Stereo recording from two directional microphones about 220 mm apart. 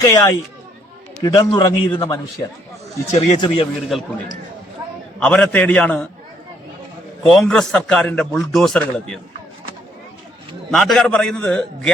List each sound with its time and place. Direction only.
0.0 s a man's voice: 15° left (ahead or behind)
3.1 s speech: 30° left (ahead or behind)
3.9 s a man's voice: centre (ahead or behind)
5.2 s a man's voice: 5° left (ahead or behind)
7.3 s a man's voice: centre (ahead or behind)
10.7 s a man's voice: centre (ahead or behind)